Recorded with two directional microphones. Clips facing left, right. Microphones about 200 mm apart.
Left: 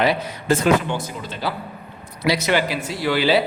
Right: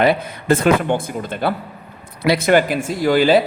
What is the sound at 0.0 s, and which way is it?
Speech, 55° right (ahead or behind).